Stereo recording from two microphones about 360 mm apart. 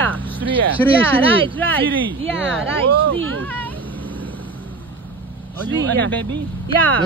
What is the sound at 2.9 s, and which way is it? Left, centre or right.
Speech, right.